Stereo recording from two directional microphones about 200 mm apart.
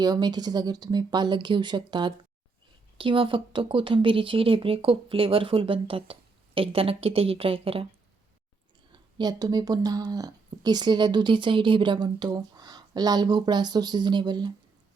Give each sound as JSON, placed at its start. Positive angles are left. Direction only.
{"t": 0.0, "sound": "speech", "side_deg": -20}
{"t": 8.9, "sound": "speech", "side_deg": -20}